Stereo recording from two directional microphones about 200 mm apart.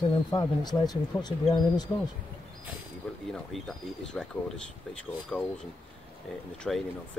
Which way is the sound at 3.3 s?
5° left (ahead or behind).